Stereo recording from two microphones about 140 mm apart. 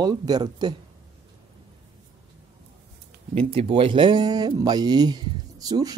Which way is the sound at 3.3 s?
45° right (ahead or behind).